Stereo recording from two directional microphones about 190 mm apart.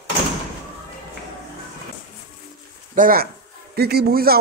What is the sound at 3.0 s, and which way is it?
Speech, 50° right (ahead or behind).